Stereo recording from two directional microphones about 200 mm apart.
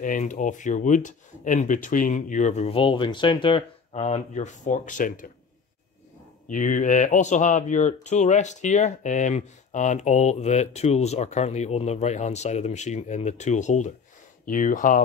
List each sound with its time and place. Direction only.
0.0 s speech: 40° left (ahead or behind)
6.5 s speech: 40° left (ahead or behind)